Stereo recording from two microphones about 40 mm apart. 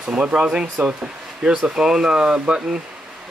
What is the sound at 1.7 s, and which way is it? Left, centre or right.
Speech, centre.